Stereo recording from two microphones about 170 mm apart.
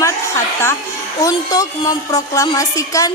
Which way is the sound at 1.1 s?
20° left (ahead or behind).